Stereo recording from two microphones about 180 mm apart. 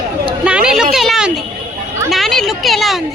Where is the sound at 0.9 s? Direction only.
Centre (ahead or behind).